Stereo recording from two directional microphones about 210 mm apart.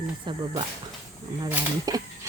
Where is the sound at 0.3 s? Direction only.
20° right (ahead or behind).